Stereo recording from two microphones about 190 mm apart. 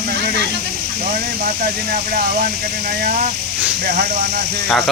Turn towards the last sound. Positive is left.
turn(degrees=-60)  # may be behind; listen again after turning